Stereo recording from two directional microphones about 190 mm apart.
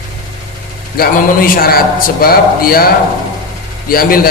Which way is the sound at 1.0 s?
50° left (ahead or behind).